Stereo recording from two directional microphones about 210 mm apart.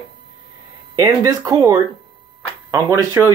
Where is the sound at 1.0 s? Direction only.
15° right (ahead or behind).